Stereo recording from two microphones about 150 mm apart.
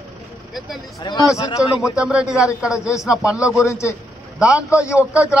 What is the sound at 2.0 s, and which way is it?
Speech, 5° right (ahead or behind).